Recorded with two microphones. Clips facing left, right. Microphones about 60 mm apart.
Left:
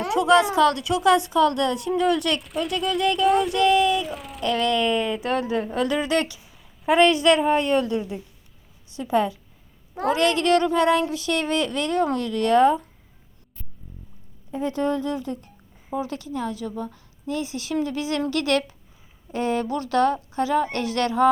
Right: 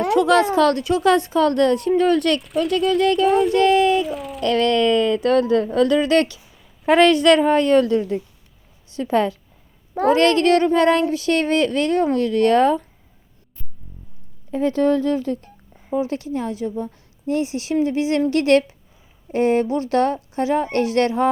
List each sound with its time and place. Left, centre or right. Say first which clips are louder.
0.0 s speech: right 2 dB; right
2.6 s a woman's voice: right 7 dB; right
3.5 s speech: right 4 dB; right
4.0 s speech: right 6 dB; centre
4.4 s a woman's voice: right 5 dB; right
6.8 s a woman's voice: right 4 dB; right
9.0 s speech: right 3 dB; right
10.0 s speech: right 6 dB; right
14.5 s a woman's voice: right 6 dB; right
16.0 s speech: right 4 dB; right